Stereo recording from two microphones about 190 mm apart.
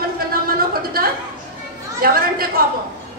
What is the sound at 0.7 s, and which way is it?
A woman's voice, 50° right (ahead or behind).